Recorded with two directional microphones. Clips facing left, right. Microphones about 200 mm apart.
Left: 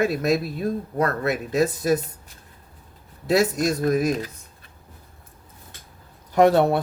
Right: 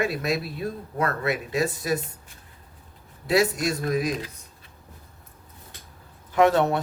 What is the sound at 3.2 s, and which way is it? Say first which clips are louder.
Speech: left 2 dB; 40° left (ahead or behind).